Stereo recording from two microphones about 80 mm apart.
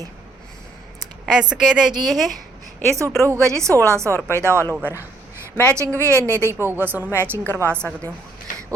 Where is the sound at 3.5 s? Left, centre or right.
Right.